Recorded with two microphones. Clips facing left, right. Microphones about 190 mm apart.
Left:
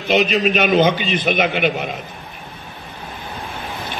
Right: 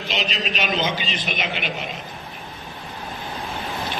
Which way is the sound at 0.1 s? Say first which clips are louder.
Left 12 dB; 55° left (ahead or behind).